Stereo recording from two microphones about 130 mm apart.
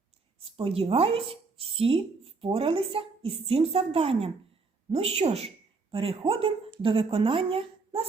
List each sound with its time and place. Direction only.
0.3 s a woman's voice: 45° right (ahead or behind)